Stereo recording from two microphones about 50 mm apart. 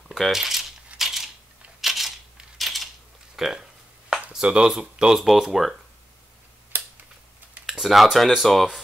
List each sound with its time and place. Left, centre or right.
0.2 s speech: centre
0.9 s a sound: centre
1.8 s camera: centre
2.5 s a sound: centre
3.3 s speech: centre
5.2 s speech: centre
7.8 s speech: centre